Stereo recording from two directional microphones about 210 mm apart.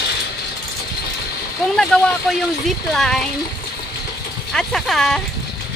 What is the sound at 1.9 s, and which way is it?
Speech, 5° left (ahead or behind).